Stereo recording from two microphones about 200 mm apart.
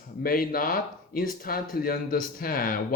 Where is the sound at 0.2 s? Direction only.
45° left (ahead or behind).